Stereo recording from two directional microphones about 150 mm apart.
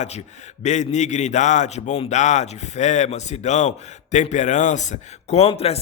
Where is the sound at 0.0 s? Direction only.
50° left (ahead or behind).